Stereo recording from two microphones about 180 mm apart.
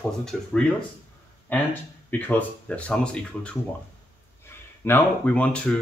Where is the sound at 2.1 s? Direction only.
10° left (ahead or behind).